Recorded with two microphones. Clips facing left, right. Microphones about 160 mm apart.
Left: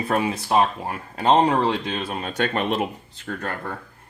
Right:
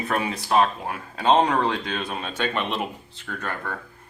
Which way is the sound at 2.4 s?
45° left (ahead or behind).